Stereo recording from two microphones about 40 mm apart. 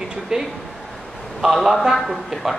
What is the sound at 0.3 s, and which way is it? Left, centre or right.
Speech, centre.